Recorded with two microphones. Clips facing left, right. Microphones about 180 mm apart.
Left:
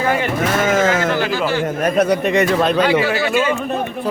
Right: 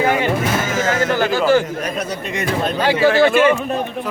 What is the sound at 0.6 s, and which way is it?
Sheep, 55° left (ahead or behind).